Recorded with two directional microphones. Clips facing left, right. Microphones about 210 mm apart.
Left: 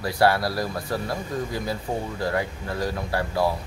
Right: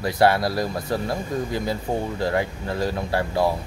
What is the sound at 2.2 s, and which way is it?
Speech, 25° right (ahead or behind).